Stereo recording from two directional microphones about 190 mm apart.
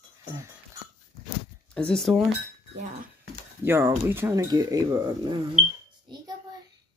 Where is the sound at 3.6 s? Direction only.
10° right (ahead or behind).